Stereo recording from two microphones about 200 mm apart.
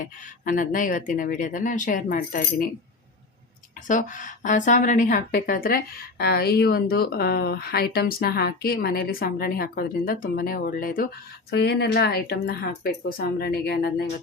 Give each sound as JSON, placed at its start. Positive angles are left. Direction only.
{"t": 0.0, "sound": "speech", "side_deg": 40}
{"t": 3.8, "sound": "speech", "side_deg": 40}